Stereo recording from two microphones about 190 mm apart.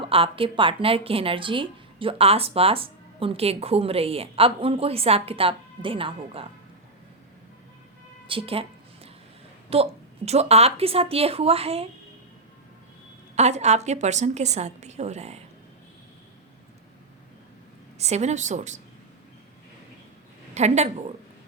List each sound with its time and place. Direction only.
0.0 s a woman's voice: 30° right (ahead or behind)
8.3 s a woman's voice: 30° right (ahead or behind)
9.6 s a woman's voice: 30° right (ahead or behind)
13.3 s a woman's voice: 35° right (ahead or behind)
17.9 s a woman's voice: 35° right (ahead or behind)
20.5 s a woman's voice: 35° right (ahead or behind)